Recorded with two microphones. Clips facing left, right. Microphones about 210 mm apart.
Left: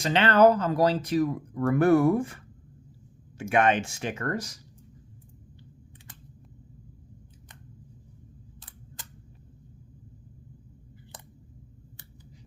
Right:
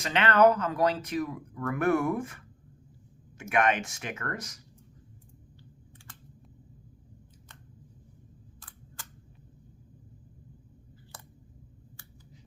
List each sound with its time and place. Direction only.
0.0 s speech: 30° left (ahead or behind)
3.5 s speech: 30° left (ahead or behind)
9.0 s a sound: 20° left (ahead or behind)